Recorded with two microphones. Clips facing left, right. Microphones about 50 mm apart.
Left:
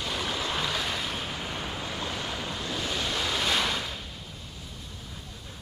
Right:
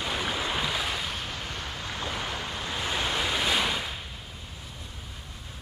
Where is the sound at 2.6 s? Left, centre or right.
Right.